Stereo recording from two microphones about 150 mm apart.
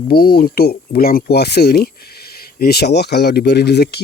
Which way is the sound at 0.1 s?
90° left.